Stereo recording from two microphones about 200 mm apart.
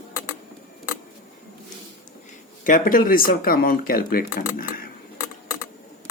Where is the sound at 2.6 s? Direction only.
40° left (ahead or behind).